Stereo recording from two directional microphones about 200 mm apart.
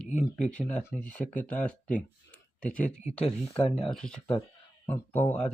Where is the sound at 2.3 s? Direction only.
5° left (ahead or behind).